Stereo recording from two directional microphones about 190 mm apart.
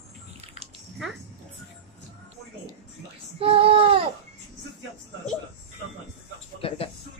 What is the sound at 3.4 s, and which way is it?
Child singing, 30° right (ahead or behind).